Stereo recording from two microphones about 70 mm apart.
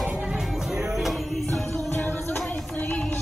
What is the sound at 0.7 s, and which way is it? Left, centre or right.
Music, centre.